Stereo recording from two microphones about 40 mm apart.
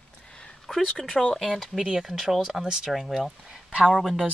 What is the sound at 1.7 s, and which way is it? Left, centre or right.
Speech, centre.